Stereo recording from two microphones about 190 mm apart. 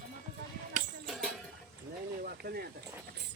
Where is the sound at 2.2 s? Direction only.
55° right (ahead or behind).